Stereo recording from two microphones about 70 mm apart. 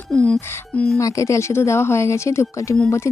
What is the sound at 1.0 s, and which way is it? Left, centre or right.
Speech, left.